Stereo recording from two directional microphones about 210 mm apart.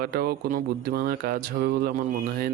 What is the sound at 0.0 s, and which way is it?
Speech, 45° right (ahead or behind).